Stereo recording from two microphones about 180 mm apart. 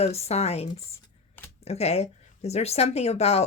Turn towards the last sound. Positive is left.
turn(degrees=35)  # may be behind; listen again after turning